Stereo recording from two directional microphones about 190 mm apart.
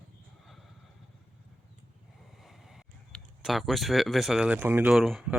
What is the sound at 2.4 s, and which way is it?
Speech, centre (ahead or behind).